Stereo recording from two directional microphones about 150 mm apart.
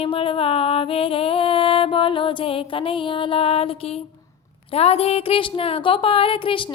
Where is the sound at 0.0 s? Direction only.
40° left (ahead or behind).